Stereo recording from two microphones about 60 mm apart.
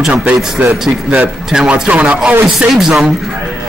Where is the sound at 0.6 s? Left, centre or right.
Right.